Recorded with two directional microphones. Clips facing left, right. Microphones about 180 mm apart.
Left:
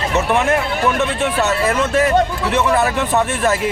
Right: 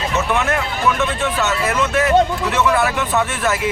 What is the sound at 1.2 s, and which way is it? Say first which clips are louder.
Speech: left 3 dB; 30° left (ahead or behind).